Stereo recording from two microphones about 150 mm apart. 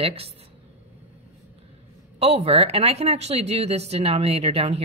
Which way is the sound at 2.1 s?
45° right (ahead or behind).